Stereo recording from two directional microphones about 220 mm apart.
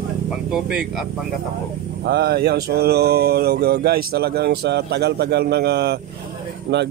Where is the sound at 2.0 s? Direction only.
50° right (ahead or behind).